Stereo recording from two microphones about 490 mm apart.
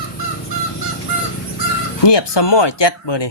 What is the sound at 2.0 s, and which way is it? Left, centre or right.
Speech, left.